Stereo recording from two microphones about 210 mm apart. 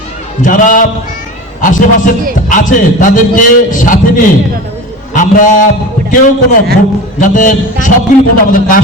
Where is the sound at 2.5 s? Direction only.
40° left (ahead or behind).